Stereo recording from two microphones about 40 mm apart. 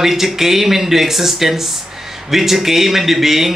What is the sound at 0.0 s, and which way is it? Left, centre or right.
A man's voice, centre.